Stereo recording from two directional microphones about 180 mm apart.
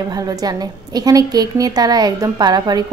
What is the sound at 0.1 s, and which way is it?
A woman's voice, 20° right (ahead or behind).